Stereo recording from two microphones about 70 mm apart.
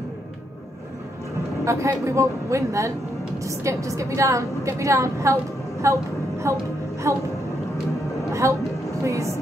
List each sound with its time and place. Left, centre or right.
1.6 s a woman's voice: right
8.3 s a sound: right
9.0 s a woman's voice: right